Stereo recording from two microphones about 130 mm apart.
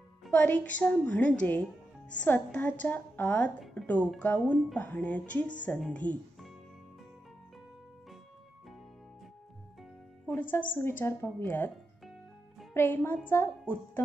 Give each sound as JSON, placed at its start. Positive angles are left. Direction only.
{"t": 0.3, "sound": "a woman's voice", "side_deg": 10}
{"t": 10.2, "sound": "a woman's voice", "side_deg": 15}
{"t": 12.7, "sound": "a woman's voice", "side_deg": 15}